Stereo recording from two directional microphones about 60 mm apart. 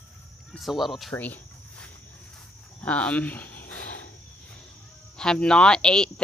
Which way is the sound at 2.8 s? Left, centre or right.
Left.